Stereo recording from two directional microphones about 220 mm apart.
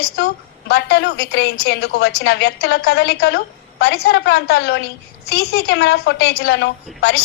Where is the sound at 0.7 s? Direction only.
50° left (ahead or behind).